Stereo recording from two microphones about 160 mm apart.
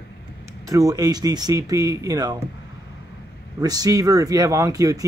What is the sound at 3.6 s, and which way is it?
Speech, 25° right (ahead or behind).